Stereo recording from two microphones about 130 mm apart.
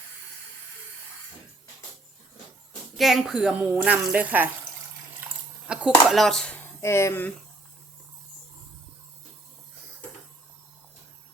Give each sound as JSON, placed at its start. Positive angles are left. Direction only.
{"t": 3.0, "sound": "a woman's voice", "side_deg": 0}